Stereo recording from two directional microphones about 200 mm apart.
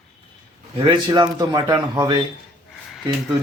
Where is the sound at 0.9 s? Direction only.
20° right (ahead or behind).